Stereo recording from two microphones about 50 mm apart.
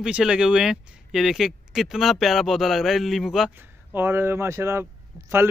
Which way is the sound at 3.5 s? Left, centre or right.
Right.